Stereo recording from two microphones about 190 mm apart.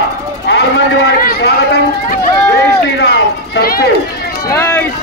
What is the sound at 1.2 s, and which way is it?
Chatter, 55° left (ahead or behind).